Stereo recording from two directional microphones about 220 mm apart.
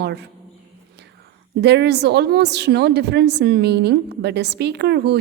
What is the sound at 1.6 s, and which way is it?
A woman's voice, 50° right (ahead or behind).